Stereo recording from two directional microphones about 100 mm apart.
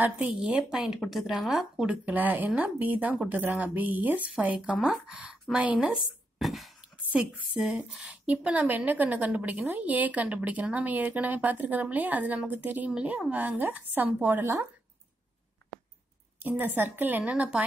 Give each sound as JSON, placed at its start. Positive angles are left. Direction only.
{"t": 0.4, "sound": "a woman's voice", "side_deg": -10}
{"t": 4.6, "sound": "a woman's voice", "side_deg": -5}
{"t": 7.0, "sound": "a woman's voice", "side_deg": -15}
{"t": 16.3, "sound": "a woman's voice", "side_deg": -20}
{"t": 17.2, "sound": "a woman's voice", "side_deg": -10}